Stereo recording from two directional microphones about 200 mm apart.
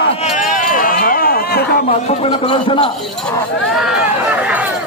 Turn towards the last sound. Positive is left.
turn(degrees=-5)  # may be behind; listen again after turning